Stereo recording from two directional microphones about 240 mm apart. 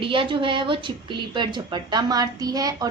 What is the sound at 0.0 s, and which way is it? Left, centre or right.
A woman's voice, right.